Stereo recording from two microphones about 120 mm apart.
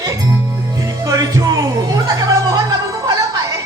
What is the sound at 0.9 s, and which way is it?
Music, 30° right (ahead or behind).